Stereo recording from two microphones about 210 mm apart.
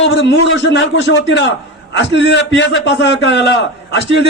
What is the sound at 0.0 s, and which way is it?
A man's voice, 60° left (ahead or behind).